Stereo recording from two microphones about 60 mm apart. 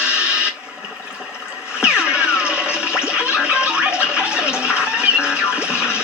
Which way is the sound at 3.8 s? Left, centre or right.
Centre.